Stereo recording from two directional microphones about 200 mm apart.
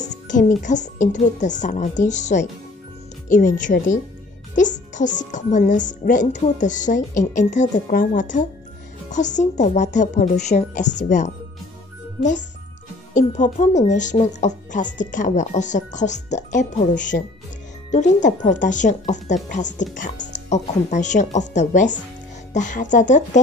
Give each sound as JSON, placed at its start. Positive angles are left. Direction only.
{"t": 0.0, "sound": "speech", "side_deg": 40}
{"t": 13.1, "sound": "speech", "side_deg": 35}